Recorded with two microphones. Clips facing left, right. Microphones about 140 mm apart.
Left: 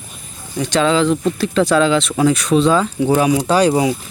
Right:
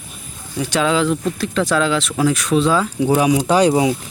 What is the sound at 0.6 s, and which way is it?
Speech, 5° right (ahead or behind).